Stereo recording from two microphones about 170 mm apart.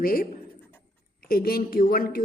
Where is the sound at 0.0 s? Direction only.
60° left (ahead or behind).